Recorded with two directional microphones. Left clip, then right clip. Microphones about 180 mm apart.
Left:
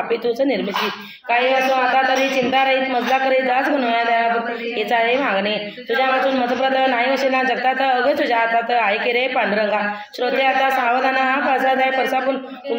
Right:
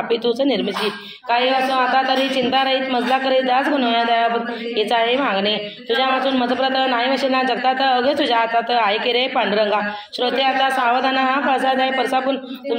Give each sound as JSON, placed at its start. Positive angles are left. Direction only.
{"t": 0.1, "sound": "a woman's voice", "side_deg": -25}